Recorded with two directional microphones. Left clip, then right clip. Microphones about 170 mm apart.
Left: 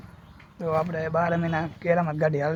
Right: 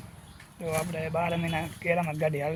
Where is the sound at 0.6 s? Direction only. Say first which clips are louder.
Left 5 dB; 25° left (ahead or behind).